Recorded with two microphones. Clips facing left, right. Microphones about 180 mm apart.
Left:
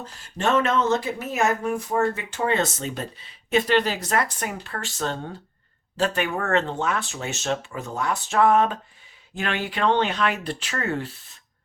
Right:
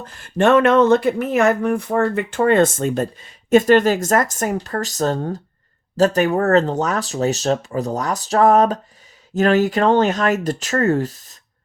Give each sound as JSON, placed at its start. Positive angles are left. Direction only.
{"t": 0.0, "sound": "speech", "side_deg": -60}